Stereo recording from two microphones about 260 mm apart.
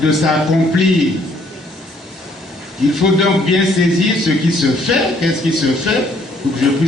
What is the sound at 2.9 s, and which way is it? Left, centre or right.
Speech, centre.